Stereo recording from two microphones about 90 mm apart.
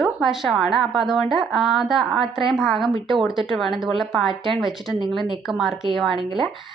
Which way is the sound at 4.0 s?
5° right (ahead or behind).